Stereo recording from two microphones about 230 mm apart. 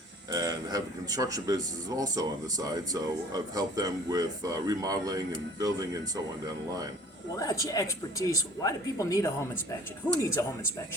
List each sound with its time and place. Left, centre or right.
0.3 s speech: centre
7.3 s speech: centre